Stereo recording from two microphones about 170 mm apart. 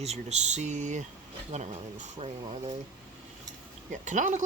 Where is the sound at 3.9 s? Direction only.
45° right (ahead or behind).